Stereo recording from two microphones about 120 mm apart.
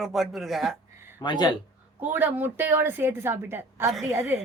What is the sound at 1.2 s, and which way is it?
Speech, 40° left (ahead or behind).